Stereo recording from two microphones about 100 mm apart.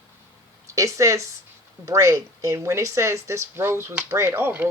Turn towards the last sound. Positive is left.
turn(degrees=-25)  # may be behind; listen again after turning